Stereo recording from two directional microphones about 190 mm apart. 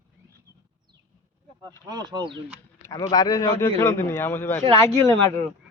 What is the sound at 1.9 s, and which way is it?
Speech, 20° right (ahead or behind).